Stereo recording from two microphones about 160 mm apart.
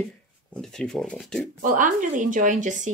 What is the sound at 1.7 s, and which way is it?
Speech, 55° right (ahead or behind).